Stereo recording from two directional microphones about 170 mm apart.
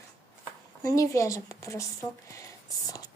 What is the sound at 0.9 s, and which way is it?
Speech, 20° left (ahead or behind).